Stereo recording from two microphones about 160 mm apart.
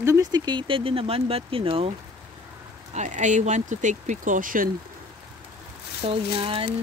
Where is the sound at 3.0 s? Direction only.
50° right (ahead or behind).